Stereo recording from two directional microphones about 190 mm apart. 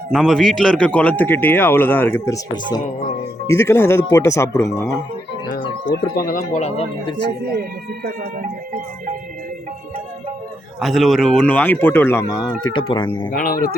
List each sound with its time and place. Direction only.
0.1 s a man's voice: centre (ahead or behind)
5.5 s speech: 50° left (ahead or behind)
7.6 s speech: 50° right (ahead or behind)
10.8 s a man's voice: centre (ahead or behind); by 12.5 s 15° left (ahead or behind)
12.6 s speech: 25° left (ahead or behind)
13.3 s speech: 50° left (ahead or behind)